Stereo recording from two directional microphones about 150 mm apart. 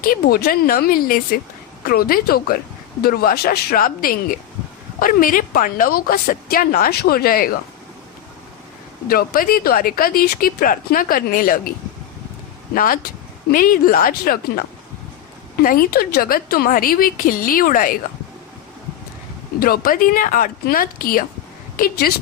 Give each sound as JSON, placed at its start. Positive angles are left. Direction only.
{"t": 0.1, "sound": "a woman's voice", "side_deg": 85}
{"t": 9.0, "sound": "speech", "side_deg": 75}
{"t": 12.7, "sound": "speech", "side_deg": 70}
{"t": 15.6, "sound": "speech", "side_deg": 80}
{"t": 19.5, "sound": "speech", "side_deg": 80}
{"t": 21.8, "sound": "a woman's voice", "side_deg": 85}